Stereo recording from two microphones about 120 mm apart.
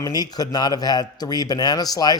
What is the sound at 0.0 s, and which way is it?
Speech, 35° left (ahead or behind).